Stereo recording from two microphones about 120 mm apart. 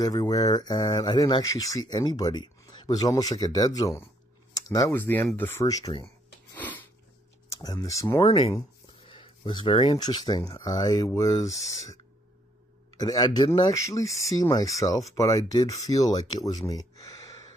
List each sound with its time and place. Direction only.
0.0 s speech: 35° left (ahead or behind); by 5.7 s 15° left (ahead or behind)
5.7 s speech: 30° left (ahead or behind)
6.5 s sneeze: 15° left (ahead or behind)
7.6 s speech: 30° left (ahead or behind)
8.3 s speech: 55° left (ahead or behind); by 16.4 s 35° left (ahead or behind)
17.0 s a sound: 30° left (ahead or behind)